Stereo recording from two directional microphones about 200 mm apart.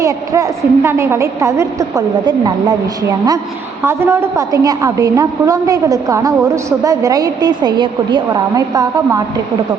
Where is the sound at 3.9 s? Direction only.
10° right (ahead or behind).